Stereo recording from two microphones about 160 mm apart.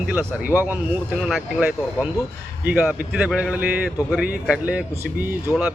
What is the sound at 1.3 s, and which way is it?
Speech, centre (ahead or behind).